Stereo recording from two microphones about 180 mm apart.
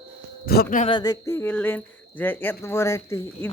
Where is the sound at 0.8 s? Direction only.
25° left (ahead or behind).